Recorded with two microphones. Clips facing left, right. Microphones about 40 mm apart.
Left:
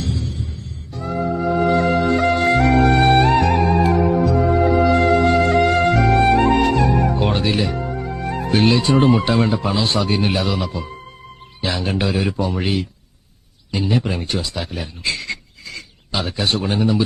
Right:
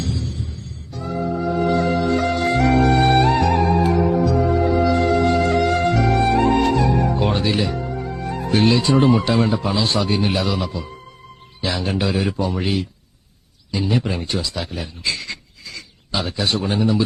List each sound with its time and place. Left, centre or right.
0.0 s music: left
5.3 s music: left
5.5 s music: left
8.4 s a man's voice: left
14.5 s a sound: left